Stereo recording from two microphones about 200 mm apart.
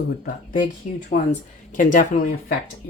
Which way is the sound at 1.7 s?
40° left (ahead or behind).